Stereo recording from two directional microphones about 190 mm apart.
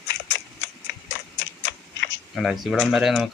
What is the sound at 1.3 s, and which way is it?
Typing, 70° left (ahead or behind).